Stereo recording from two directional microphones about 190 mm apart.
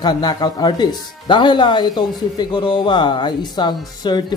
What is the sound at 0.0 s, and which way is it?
Speech, 20° left (ahead or behind).